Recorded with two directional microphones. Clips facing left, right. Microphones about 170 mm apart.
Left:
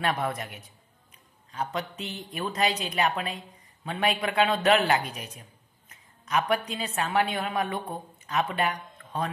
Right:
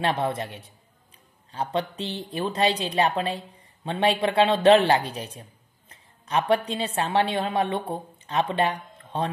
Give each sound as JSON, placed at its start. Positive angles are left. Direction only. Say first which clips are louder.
{"t": 0.0, "sound": "a man's voice", "louder": "right 3 dB", "side_deg": -30}